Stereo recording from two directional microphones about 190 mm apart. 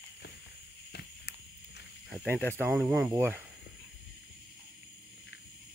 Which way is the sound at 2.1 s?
10° right (ahead or behind).